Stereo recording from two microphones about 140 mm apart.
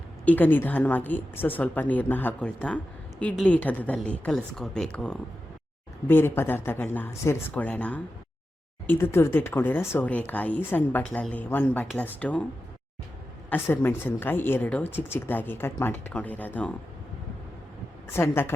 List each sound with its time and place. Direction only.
0.3 s speech: 15° left (ahead or behind)
13.5 s speech: 15° left (ahead or behind)
18.1 s speech: 15° left (ahead or behind)